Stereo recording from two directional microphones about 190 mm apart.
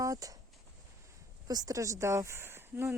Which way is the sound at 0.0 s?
20° right (ahead or behind).